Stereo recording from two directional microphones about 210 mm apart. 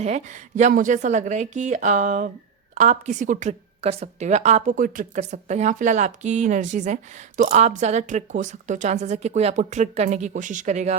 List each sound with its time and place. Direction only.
0.0 s a woman's voice: 35° right (ahead or behind)